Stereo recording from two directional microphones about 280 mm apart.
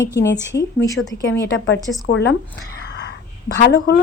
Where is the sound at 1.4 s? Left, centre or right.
Left.